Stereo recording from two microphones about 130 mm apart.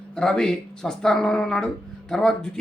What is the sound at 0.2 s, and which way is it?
Speech, 5° left (ahead or behind).